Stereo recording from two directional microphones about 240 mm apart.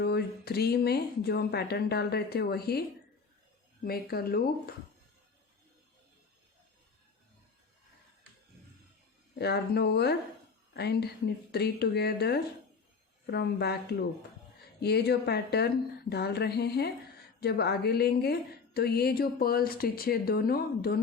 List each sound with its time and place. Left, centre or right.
0.0 s a woman's voice: left
3.8 s a woman's voice: left
9.4 s speech: left
14.8 s a woman's voice: left